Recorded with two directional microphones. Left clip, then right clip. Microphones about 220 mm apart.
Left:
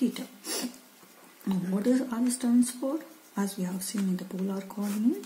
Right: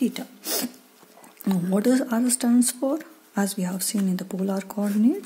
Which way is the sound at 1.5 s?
45° right (ahead or behind).